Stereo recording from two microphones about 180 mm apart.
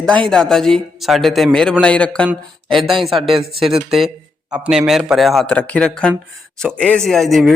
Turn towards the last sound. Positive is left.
turn(degrees=0)  # may be behind; listen again after turning